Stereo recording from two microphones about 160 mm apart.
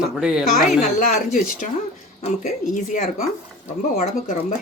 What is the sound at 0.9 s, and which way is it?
Speech, 60° left (ahead or behind).